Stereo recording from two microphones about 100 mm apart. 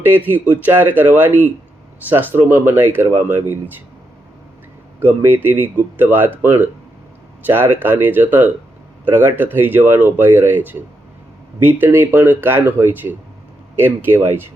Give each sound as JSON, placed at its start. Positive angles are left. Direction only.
{"t": 0.0, "sound": "speech", "side_deg": -20}
{"t": 4.9, "sound": "speech", "side_deg": -20}